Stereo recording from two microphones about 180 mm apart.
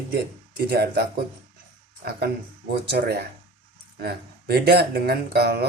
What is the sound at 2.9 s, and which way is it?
Speech, 60° right (ahead or behind).